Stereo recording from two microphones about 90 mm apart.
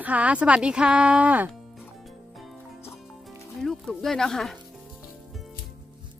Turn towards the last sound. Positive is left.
turn(degrees=5)  # may be behind; listen again after turning